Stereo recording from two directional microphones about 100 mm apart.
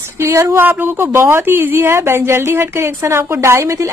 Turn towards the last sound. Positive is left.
turn(degrees=-30)  # may be behind; listen again after turning